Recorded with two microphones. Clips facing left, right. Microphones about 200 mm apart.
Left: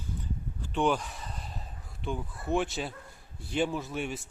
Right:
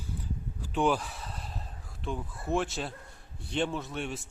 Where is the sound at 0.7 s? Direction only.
5° right (ahead or behind).